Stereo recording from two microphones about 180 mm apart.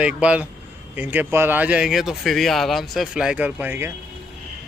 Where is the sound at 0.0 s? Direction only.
5° right (ahead or behind).